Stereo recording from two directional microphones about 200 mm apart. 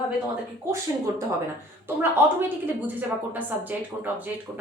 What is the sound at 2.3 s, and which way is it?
Speech, 10° right (ahead or behind).